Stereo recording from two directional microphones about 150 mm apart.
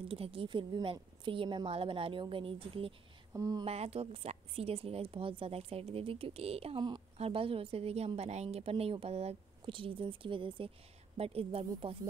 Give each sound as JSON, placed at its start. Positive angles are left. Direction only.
{"t": 0.1, "sound": "a woman's voice", "side_deg": -35}
{"t": 3.3, "sound": "speech", "side_deg": -25}
{"t": 3.6, "sound": "a woman's voice", "side_deg": -40}